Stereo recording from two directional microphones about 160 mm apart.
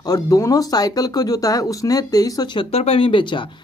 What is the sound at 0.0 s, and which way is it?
Speech, 20° left (ahead or behind).